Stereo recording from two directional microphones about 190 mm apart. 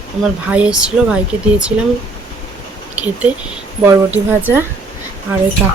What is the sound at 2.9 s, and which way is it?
Speech, 5° right (ahead or behind).